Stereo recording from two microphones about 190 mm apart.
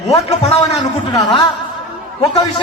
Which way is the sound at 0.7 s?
20° left (ahead or behind).